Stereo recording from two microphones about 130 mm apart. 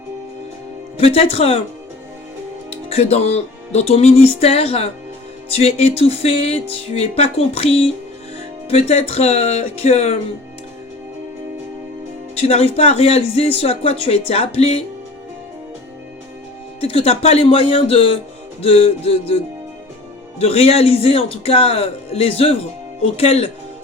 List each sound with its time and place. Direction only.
0.9 s speech: 50° left (ahead or behind)
2.9 s speech: 55° left (ahead or behind)
12.4 s speech: 50° left (ahead or behind)
16.8 s speech: 50° left (ahead or behind)
20.4 s speech: 50° left (ahead or behind)